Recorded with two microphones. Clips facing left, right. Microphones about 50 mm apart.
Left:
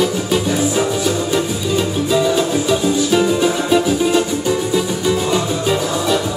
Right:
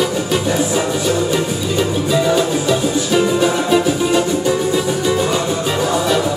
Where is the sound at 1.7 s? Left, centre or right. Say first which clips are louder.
Even; centre.